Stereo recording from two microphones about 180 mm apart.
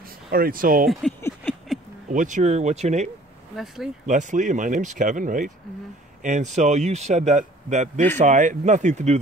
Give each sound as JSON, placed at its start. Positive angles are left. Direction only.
{"t": 0.3, "sound": "speech", "side_deg": -55}
{"t": 2.0, "sound": "a man's voice", "side_deg": -45}
{"t": 3.5, "sound": "speech", "side_deg": 0}
{"t": 4.0, "sound": "a man's voice", "side_deg": -45}